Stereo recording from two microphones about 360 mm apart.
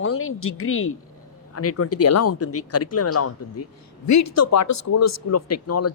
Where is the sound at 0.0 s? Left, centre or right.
Left.